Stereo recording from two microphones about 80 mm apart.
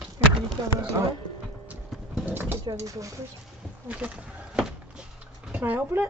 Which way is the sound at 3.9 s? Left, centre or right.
Centre.